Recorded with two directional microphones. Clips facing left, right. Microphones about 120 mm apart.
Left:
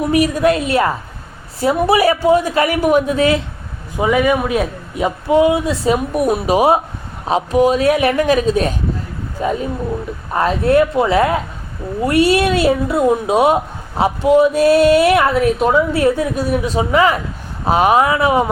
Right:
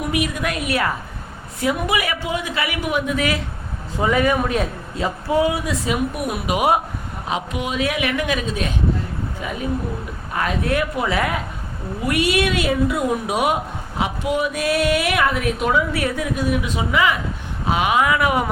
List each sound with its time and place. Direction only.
0.0 s a woman's voice: 35° left (ahead or behind)
3.9 s a man's voice: 10° left (ahead or behind); by 18.5 s 25° left (ahead or behind)